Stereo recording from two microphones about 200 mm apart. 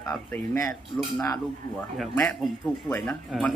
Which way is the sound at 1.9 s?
5° left (ahead or behind).